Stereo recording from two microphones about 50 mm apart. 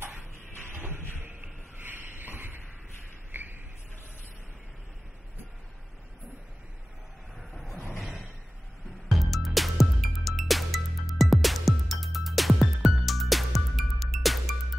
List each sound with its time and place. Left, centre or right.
0.7 s music: right
1.4 s a sound: right
7.3 s vehicle: centre
9.1 s music: centre